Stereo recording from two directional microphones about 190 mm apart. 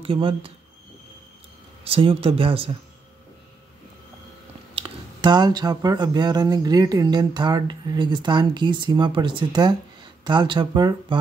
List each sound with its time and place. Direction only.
0.0 s speech: 30° right (ahead or behind)
1.9 s speech: 30° right (ahead or behind)
4.7 s speech: 25° right (ahead or behind)